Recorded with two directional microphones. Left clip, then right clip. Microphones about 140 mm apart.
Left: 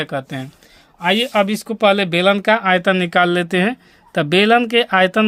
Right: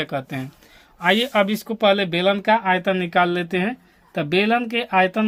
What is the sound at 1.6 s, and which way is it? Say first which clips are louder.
Speech: left 3 dB; 45° left (ahead or behind).